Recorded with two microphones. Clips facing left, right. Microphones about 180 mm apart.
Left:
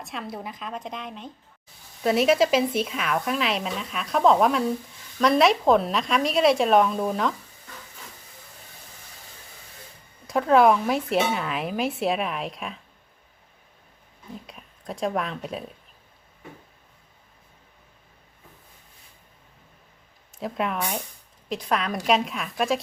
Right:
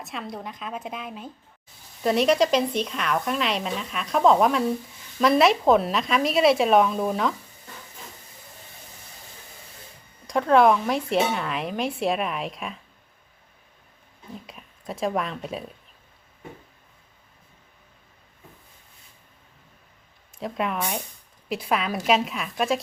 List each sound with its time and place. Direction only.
0.0 s speech: centre (ahead or behind)
10.2 s speech: centre (ahead or behind)
14.3 s speech: centre (ahead or behind)
20.4 s speech: centre (ahead or behind)